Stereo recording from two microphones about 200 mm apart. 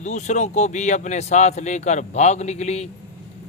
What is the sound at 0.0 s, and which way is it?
Speech, 35° left (ahead or behind).